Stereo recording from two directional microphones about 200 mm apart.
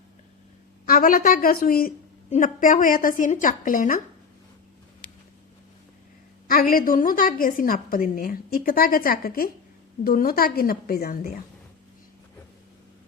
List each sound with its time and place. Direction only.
0.9 s a woman's voice: 45° left (ahead or behind)
6.5 s a woman's voice: 45° left (ahead or behind)